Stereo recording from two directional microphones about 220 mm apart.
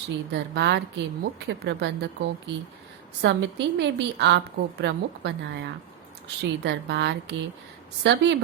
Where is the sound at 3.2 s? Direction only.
55° right (ahead or behind).